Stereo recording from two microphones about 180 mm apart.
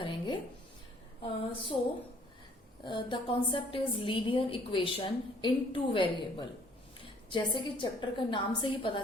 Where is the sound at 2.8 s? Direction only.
25° left (ahead or behind).